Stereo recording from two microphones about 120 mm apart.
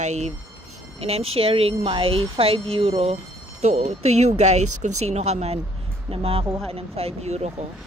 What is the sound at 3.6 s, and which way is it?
Speech, 75° right (ahead or behind).